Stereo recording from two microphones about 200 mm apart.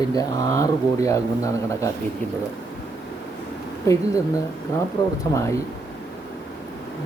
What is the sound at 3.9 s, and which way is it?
Speech, 15° left (ahead or behind).